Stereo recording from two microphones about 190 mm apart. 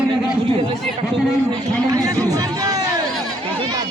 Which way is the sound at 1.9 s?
15° right (ahead or behind).